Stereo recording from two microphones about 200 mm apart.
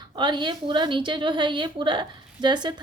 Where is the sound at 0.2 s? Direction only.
25° right (ahead or behind).